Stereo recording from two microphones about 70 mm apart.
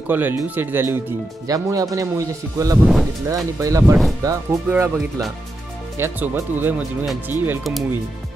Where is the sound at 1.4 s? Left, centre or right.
Right.